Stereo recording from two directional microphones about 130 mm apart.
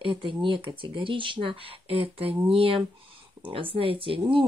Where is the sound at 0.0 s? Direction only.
40° right (ahead or behind).